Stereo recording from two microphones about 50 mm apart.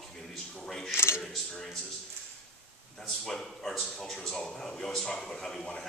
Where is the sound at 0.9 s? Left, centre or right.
Left.